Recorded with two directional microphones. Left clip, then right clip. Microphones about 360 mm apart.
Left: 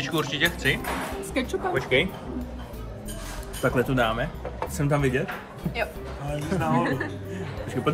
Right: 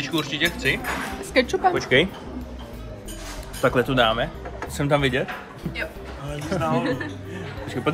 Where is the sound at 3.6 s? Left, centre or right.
Centre.